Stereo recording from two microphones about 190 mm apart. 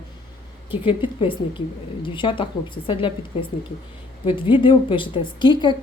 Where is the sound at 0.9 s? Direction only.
25° left (ahead or behind).